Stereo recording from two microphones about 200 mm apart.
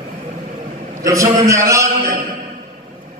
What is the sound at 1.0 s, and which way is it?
Speech, 15° right (ahead or behind).